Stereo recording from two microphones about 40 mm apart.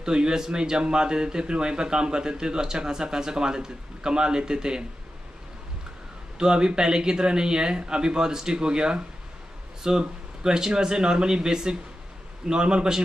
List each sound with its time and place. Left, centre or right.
0.0 s speech: centre
6.3 s speech: right